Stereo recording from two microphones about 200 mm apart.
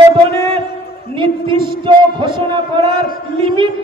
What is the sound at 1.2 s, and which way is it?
Speech, 25° right (ahead or behind).